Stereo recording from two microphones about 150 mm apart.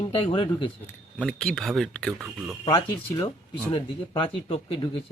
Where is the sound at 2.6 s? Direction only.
30° left (ahead or behind).